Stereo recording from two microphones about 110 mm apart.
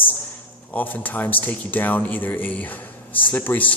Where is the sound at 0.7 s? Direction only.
15° left (ahead or behind).